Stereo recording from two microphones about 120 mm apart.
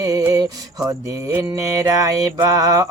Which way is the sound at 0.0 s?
30° right (ahead or behind).